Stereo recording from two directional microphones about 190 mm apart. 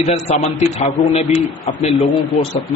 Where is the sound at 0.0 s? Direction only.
35° left (ahead or behind).